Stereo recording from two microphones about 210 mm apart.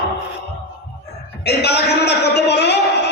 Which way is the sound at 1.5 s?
50° left (ahead or behind).